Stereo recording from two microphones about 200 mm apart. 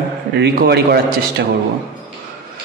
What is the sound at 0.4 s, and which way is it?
Speech, 55° right (ahead or behind).